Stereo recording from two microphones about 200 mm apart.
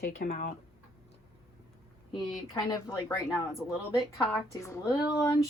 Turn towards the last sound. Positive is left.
turn(degrees=15)  # may be behind; listen again after turning